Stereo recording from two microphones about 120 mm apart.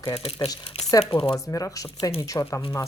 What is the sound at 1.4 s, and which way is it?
Speech, 30° left (ahead or behind).